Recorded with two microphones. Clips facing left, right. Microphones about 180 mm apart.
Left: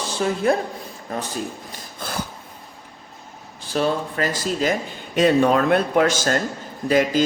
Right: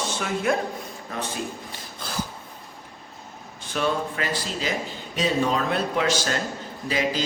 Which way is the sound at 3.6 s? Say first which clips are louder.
Left 3 dB; 35° left (ahead or behind).